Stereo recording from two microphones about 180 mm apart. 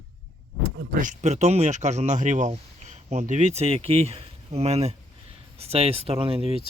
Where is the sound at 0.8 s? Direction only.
45° right (ahead or behind).